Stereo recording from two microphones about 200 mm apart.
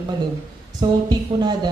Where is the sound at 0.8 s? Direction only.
20° right (ahead or behind).